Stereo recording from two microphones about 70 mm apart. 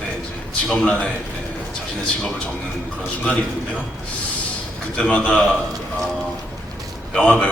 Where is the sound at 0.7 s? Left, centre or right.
Centre.